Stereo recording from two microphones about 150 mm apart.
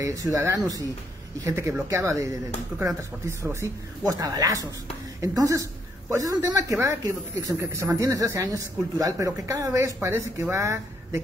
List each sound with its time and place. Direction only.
0.0 s a woman's voice: 20° right (ahead or behind)